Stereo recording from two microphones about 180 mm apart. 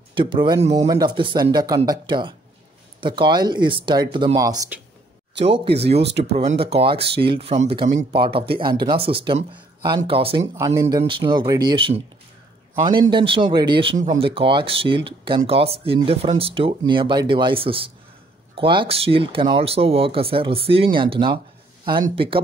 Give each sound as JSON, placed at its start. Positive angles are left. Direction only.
{"t": 0.1, "sound": "speech", "side_deg": -25}
{"t": 0.7, "sound": "speech", "side_deg": -20}
{"t": 5.7, "sound": "speech", "side_deg": -35}
{"t": 5.9, "sound": "speech", "side_deg": -70}
{"t": 6.6, "sound": "speech", "side_deg": -30}
{"t": 10.4, "sound": "speech", "side_deg": -15}
{"t": 13.1, "sound": "speech", "side_deg": -30}